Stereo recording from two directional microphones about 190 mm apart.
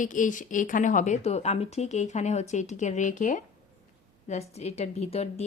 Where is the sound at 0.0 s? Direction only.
40° left (ahead or behind).